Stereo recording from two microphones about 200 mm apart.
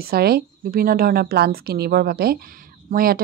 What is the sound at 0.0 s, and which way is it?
Speech, 50° right (ahead or behind).